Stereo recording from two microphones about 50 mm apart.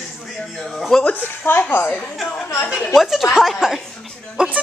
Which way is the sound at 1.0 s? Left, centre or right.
Left.